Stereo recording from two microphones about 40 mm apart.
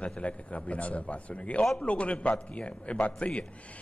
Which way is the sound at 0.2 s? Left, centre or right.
Left.